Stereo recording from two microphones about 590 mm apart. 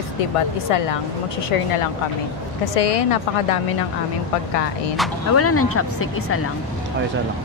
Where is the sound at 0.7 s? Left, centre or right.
Left.